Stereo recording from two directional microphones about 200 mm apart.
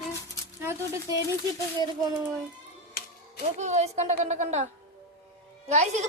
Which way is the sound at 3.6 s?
35° right (ahead or behind).